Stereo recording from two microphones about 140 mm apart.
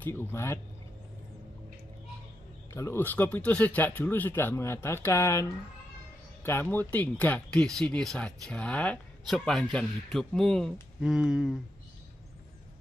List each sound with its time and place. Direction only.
0.0 s speech: 15° left (ahead or behind)
2.7 s speech: 20° left (ahead or behind); by 11.6 s centre (ahead or behind)